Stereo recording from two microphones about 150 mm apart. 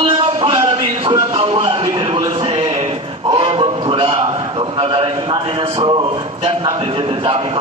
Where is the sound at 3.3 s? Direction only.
35° right (ahead or behind).